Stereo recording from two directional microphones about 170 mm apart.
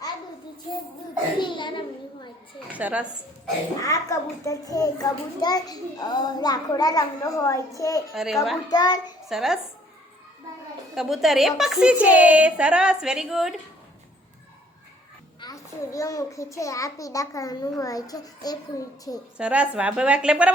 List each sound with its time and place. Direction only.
1.4 s a child's voice: 30° left (ahead or behind)
2.7 s speech: 10° right (ahead or behind)
3.8 s a child's voice: 20° left (ahead or behind)
8.1 s a woman's voice: centre (ahead or behind)
8.7 s a child's voice: 25° left (ahead or behind)
9.3 s a woman's voice: centre (ahead or behind)
10.9 s a woman's voice: centre (ahead or behind)
15.4 s a child's voice: 20° left (ahead or behind)
19.4 s speech: 5° right (ahead or behind)